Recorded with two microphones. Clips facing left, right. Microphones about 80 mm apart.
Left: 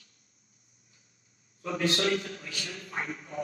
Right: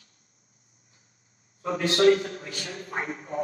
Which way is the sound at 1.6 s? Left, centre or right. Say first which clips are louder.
Right 7 dB; right.